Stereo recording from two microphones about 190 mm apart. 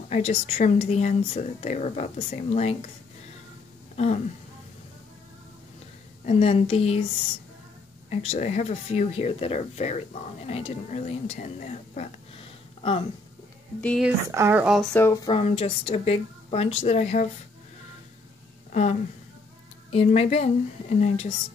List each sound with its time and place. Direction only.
0.1 s speech: 35° left (ahead or behind)
3.9 s a sound: 35° left (ahead or behind)
6.2 s speech: 30° left (ahead or behind)
8.1 s speech: 35° left (ahead or behind)
13.7 s speech: 5° left (ahead or behind)
14.3 s speech: 10° right (ahead or behind)
15.0 s speech: 15° left (ahead or behind)
15.2 s speech: 30° left (ahead or behind)
18.7 s a woman's voice: 35° left (ahead or behind)